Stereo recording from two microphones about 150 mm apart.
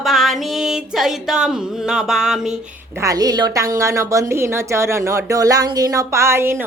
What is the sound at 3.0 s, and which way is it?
A woman's voice, 25° right (ahead or behind).